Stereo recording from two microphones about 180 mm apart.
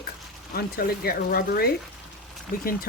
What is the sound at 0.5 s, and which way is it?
Speech, 60° left (ahead or behind).